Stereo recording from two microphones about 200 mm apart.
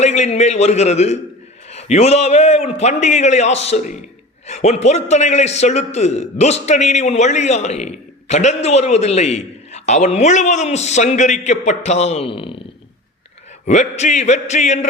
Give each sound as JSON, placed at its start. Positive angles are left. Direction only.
{"t": 0.0, "sound": "a man's voice", "side_deg": 35}
{"t": 13.7, "sound": "a man's voice", "side_deg": 35}